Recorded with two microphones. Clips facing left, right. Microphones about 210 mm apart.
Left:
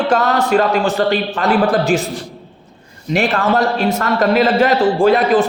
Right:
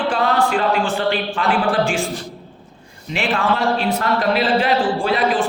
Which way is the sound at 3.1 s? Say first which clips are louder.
Left 5 dB; 40° left (ahead or behind).